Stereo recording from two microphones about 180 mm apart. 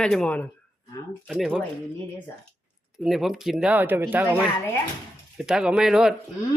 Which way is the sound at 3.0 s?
Centre (ahead or behind).